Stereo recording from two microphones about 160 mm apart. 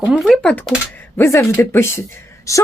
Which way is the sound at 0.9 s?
15° left (ahead or behind).